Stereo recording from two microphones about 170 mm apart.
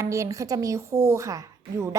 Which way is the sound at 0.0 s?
20° right (ahead or behind).